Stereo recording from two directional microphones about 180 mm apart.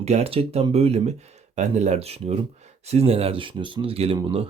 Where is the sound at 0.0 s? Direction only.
35° right (ahead or behind).